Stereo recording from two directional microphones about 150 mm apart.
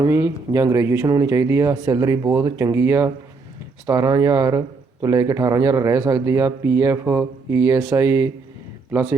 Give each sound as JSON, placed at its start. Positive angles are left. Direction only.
{"t": 0.0, "sound": "speech", "side_deg": -20}